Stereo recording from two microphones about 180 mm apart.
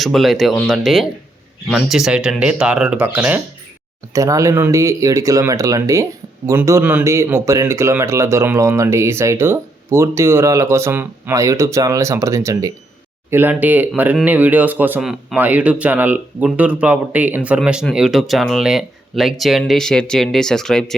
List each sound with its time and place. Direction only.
0.0 s speech: centre (ahead or behind)